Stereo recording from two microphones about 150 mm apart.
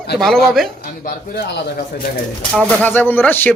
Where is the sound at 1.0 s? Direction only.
85° left.